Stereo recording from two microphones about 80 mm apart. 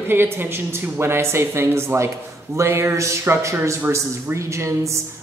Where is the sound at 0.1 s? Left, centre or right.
Right.